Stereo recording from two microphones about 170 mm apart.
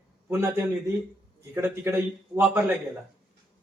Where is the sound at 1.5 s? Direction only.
15° right (ahead or behind).